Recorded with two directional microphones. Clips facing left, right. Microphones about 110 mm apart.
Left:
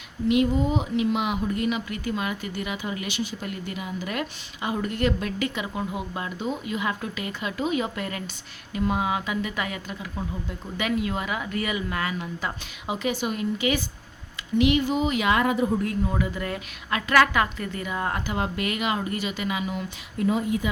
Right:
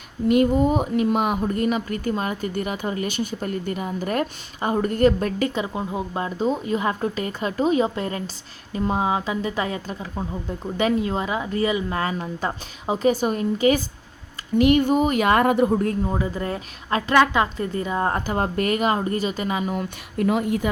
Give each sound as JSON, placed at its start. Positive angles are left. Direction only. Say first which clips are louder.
{"t": 0.3, "sound": "a woman's voice", "louder": "right 4 dB", "side_deg": -45}
{"t": 15.8, "sound": "a woman's voice", "louder": "right 3 dB", "side_deg": -35}
{"t": 20.2, "sound": "a woman's voice", "louder": "right 2 dB", "side_deg": -60}